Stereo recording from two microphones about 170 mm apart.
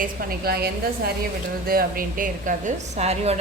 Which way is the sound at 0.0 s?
65° right (ahead or behind).